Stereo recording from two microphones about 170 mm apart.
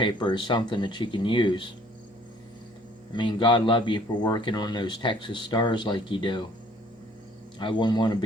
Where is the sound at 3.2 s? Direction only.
30° left (ahead or behind).